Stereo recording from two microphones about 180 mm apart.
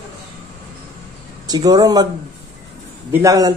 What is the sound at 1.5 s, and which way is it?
Speech, 20° right (ahead or behind).